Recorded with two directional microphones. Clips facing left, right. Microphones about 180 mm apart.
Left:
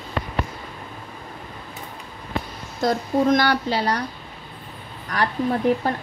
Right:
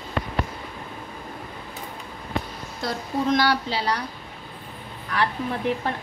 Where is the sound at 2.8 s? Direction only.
50° left (ahead or behind).